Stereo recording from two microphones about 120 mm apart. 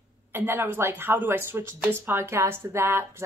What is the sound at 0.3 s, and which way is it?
Speech, 20° right (ahead or behind).